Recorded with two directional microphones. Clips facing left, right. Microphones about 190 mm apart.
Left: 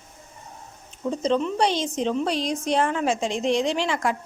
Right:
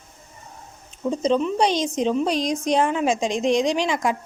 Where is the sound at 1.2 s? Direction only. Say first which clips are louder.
Right 2 dB; 15° right (ahead or behind).